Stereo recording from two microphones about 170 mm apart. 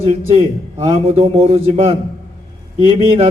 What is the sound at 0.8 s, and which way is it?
Speech, 30° right (ahead or behind).